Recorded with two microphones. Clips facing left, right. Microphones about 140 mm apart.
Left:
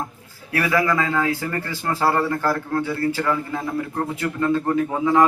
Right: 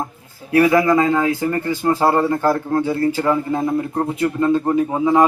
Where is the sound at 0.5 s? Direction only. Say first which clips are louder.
Right 7 dB; 25° right (ahead or behind).